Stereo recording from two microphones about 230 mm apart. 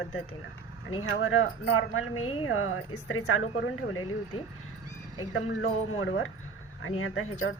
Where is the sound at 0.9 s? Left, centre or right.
Left.